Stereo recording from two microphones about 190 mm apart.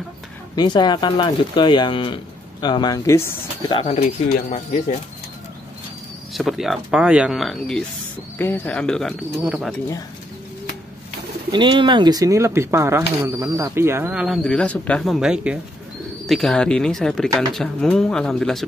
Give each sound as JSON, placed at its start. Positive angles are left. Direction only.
{"t": 0.6, "sound": "speech", "side_deg": 25}
{"t": 3.7, "sound": "speech", "side_deg": 35}
{"t": 6.3, "sound": "speech", "side_deg": 0}
{"t": 11.5, "sound": "speech", "side_deg": -25}